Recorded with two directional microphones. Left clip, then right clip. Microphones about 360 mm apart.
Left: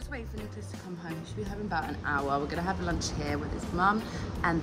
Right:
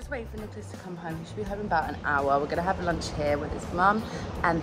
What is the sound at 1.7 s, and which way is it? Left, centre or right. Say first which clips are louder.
Speech: right 5 dB; centre.